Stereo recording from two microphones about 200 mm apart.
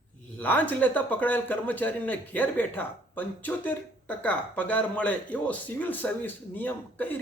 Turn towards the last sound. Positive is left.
turn(degrees=10)  # may be behind; listen again after turning